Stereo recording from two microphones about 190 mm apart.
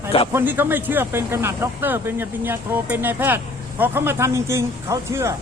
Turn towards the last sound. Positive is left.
turn(degrees=-15)  # may be behind; listen again after turning